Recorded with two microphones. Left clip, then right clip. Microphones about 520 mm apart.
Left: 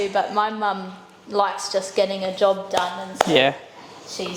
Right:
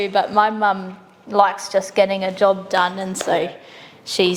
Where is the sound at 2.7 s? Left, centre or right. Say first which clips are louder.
Right 5 dB; right.